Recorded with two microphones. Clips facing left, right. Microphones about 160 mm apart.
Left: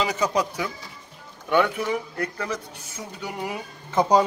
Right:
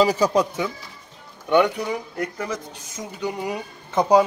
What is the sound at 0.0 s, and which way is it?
Speech, 30° right (ahead or behind).